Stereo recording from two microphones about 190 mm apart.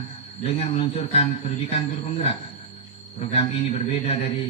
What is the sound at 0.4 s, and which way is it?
A man's voice, 30° left (ahead or behind).